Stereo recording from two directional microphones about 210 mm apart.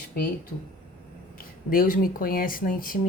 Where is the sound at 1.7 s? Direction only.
40° left (ahead or behind).